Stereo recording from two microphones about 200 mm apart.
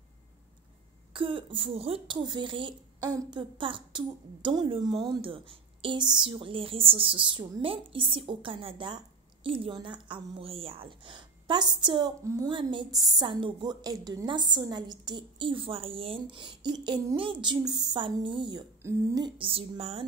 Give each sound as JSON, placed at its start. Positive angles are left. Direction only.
{"t": 1.1, "sound": "speech", "side_deg": -25}